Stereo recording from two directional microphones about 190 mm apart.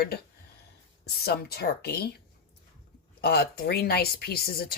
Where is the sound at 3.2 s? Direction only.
55° left (ahead or behind).